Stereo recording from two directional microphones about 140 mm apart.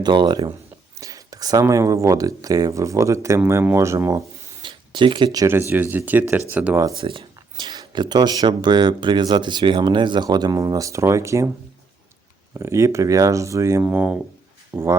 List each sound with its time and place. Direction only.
0.0 s speech: 35° right (ahead or behind)
4.6 s speech: 35° right (ahead or behind)
5.5 s speech: 15° right (ahead or behind)
7.0 s speech: 35° right (ahead or behind); by 11.5 s 20° right (ahead or behind)
12.5 s speech: 20° right (ahead or behind)